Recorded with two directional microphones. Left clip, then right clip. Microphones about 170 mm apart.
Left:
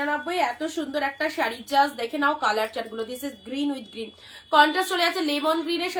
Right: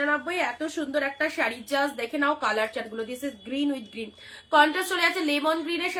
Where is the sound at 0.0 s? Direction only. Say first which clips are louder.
Left 1 dB; 20° right (ahead or behind).